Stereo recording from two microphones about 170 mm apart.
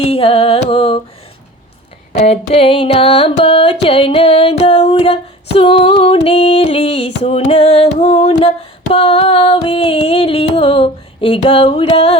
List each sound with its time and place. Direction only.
0.0 s music: 35° left (ahead or behind)
2.1 s music: 45° left (ahead or behind)